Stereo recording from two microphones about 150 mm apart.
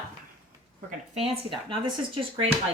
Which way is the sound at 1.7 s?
35° right (ahead or behind).